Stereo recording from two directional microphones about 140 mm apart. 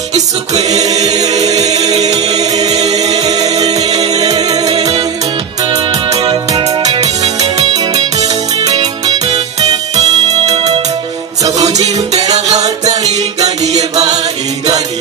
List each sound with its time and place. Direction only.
0.5 s music: 25° right (ahead or behind)
8.2 s music: 25° right (ahead or behind)
9.3 s music: 50° right (ahead or behind)
11.4 s music: 25° right (ahead or behind)
13.7 s music: 50° right (ahead or behind)